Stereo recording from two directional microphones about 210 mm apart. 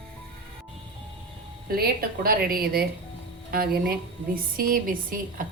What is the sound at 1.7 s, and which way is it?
A woman's voice, 45° right (ahead or behind).